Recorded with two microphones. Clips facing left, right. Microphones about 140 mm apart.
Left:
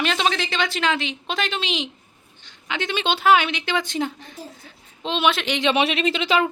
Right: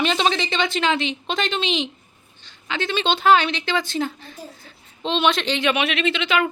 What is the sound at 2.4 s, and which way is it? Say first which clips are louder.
Speech: right 1 dB; 15° left (ahead or behind).